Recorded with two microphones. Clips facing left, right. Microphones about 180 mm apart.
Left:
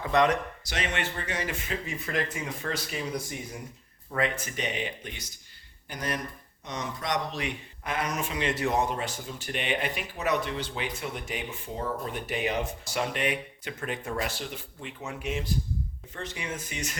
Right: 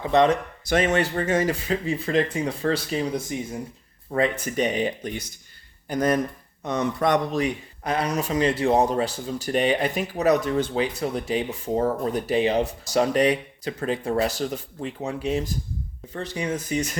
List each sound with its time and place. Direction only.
0.1 s speech: 25° right (ahead or behind)
0.6 s a man's voice: 50° right (ahead or behind); by 3.6 s 20° right (ahead or behind)
4.1 s a man's voice: 40° right (ahead or behind)
6.7 s a man's voice: 55° right (ahead or behind); by 17.0 s 40° right (ahead or behind)